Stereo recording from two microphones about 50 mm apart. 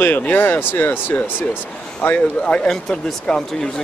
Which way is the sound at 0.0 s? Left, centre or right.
Left.